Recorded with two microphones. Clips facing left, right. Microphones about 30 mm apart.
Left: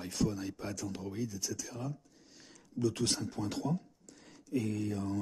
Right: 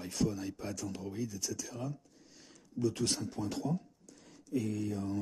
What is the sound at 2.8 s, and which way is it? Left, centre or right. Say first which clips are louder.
Speech: even; left.